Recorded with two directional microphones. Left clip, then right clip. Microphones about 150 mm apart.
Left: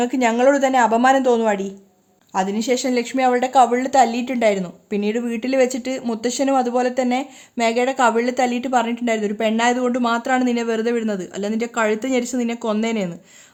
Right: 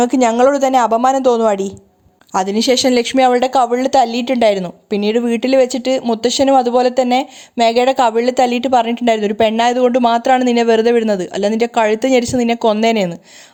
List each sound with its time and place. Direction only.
0.0 s a woman's voice: 35° right (ahead or behind)